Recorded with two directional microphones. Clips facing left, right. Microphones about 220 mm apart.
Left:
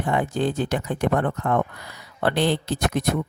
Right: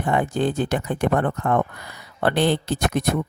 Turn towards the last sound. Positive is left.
turn(degrees=-55)  # may be behind; listen again after turning